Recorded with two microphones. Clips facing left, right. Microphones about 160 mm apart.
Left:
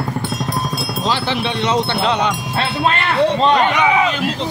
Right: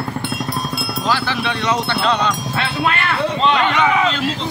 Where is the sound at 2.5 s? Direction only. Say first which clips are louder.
Left 2 dB; 30° left (ahead or behind).